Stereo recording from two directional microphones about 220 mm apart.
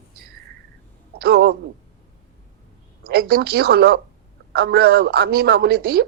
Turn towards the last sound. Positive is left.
turn(degrees=-45)  # may be behind; listen again after turning